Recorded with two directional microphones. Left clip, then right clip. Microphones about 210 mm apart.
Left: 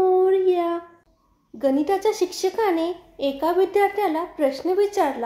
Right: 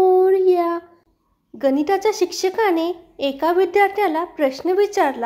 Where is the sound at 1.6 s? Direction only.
25° right (ahead or behind).